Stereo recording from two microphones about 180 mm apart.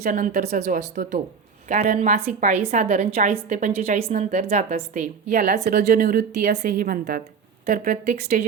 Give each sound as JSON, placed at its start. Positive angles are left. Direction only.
{"t": 0.0, "sound": "a woman's voice", "side_deg": -50}
{"t": 5.7, "sound": "a woman's voice", "side_deg": -60}
{"t": 6.3, "sound": "a woman's voice", "side_deg": -40}